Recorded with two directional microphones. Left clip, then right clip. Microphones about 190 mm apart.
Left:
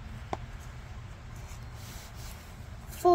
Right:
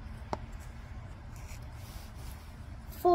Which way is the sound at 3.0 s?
5° left (ahead or behind).